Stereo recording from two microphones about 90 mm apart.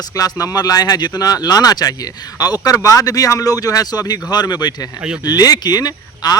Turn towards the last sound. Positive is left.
turn(degrees=45)  # may be behind; listen again after turning